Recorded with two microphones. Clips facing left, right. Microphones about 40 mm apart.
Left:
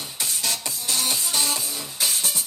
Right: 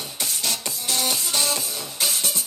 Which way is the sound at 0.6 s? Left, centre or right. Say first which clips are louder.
Right 1 dB; right.